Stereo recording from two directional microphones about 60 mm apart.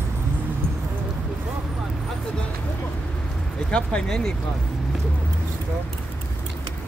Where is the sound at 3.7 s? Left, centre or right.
Centre.